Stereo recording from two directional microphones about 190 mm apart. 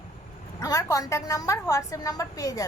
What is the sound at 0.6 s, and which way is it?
A woman's voice, 15° left (ahead or behind).